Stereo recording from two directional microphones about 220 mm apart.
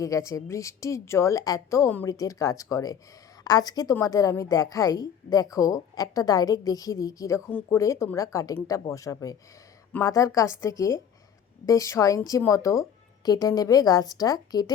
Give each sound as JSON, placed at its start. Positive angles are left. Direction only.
{"t": 0.0, "sound": "a woman's voice", "side_deg": 15}